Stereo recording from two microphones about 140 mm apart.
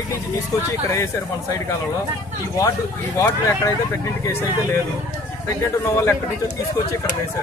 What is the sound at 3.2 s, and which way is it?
Speech, 20° left (ahead or behind).